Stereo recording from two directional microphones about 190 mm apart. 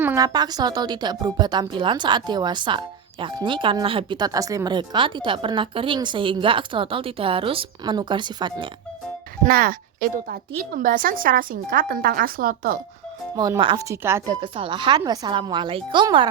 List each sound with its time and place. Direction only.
0.0 s speech: 15° right (ahead or behind)
9.4 s a woman's voice: 50° right (ahead or behind)
13.3 s speech: 20° right (ahead or behind)
14.4 s speech: 25° right (ahead or behind)